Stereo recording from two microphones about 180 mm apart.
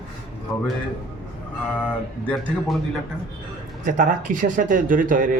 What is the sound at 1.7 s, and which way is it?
Speech, 5° left (ahead or behind).